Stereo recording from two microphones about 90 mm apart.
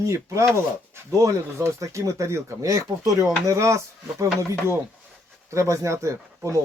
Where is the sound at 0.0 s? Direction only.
35° right (ahead or behind).